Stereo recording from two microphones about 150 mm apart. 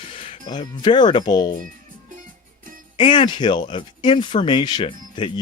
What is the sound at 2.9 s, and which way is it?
Speech, 35° left (ahead or behind).